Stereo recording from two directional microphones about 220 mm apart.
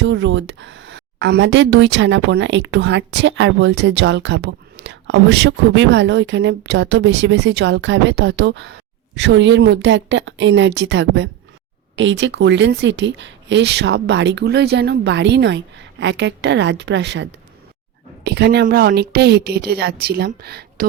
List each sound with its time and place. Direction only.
0.0 s speech: 55° right (ahead or behind)